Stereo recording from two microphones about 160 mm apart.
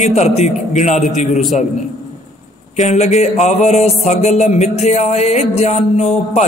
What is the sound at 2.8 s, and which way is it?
Speech, 45° left (ahead or behind).